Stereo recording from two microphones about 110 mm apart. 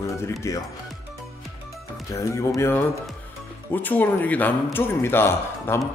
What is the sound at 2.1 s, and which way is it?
Speech, 30° left (ahead or behind).